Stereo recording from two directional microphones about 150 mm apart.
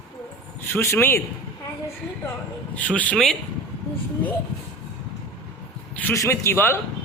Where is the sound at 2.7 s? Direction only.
10° left (ahead or behind).